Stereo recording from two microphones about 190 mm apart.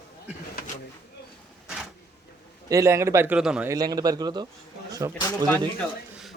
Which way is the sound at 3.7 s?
20° right (ahead or behind).